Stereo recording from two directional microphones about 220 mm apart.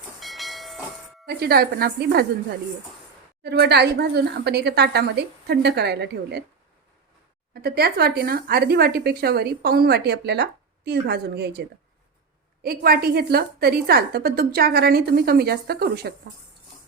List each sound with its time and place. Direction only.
0.2 s train: centre (ahead or behind)
1.3 s speech: 45° right (ahead or behind)
3.4 s speech: 50° right (ahead or behind)
7.5 s speech: 45° right (ahead or behind)
12.6 s speech: 40° right (ahead or behind)